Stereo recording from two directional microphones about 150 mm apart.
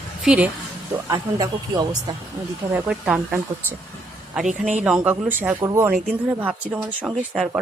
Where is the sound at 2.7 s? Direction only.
10° right (ahead or behind).